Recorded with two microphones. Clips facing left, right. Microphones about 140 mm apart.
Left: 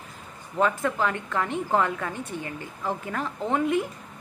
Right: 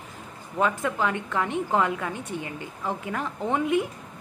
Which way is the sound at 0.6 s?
10° right (ahead or behind).